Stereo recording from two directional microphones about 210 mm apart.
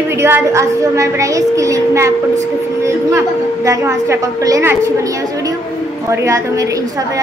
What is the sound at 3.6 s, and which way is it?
A woman's voice, 15° right (ahead or behind).